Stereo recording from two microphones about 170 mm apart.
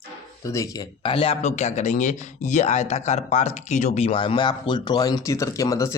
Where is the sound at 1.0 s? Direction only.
35° left (ahead or behind).